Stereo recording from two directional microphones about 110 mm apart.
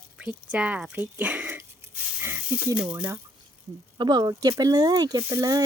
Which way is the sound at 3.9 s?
40° right (ahead or behind).